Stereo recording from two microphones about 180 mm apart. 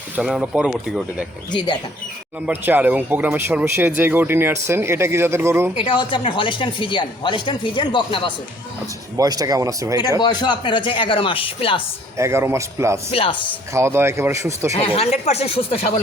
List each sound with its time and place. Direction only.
0.2 s speech: centre (ahead or behind)
1.5 s speech: 25° left (ahead or behind)
2.5 s speech: 10° right (ahead or behind)
5.7 s speech: 30° left (ahead or behind)
9.1 s speech: 20° right (ahead or behind)
10.2 s speech: 25° left (ahead or behind)
12.1 s speech: 15° right (ahead or behind)
13.1 s speech: 30° left (ahead or behind)
13.7 s speech: 15° right (ahead or behind)
14.7 s speech: 35° left (ahead or behind)